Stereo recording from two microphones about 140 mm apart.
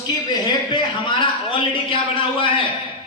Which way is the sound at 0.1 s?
30° left (ahead or behind).